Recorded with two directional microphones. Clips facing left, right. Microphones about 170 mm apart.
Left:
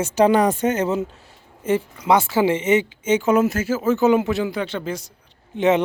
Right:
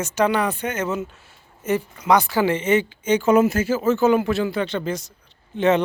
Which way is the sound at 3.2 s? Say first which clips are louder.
Right 4 dB; centre (ahead or behind).